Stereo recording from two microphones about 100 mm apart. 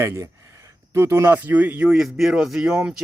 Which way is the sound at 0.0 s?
30° right (ahead or behind).